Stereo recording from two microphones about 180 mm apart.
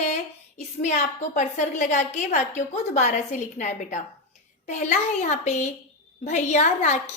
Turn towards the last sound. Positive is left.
turn(degrees=40)  # may be behind; listen again after turning